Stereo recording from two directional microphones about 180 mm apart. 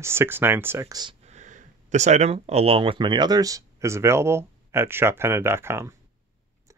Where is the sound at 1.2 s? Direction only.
40° right (ahead or behind).